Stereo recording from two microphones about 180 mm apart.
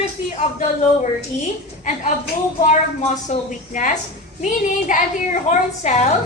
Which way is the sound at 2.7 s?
40° left (ahead or behind).